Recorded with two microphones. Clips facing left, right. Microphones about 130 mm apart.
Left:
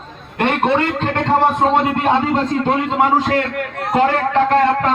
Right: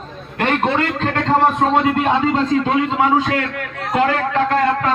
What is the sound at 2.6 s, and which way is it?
A man's voice, 30° left (ahead or behind).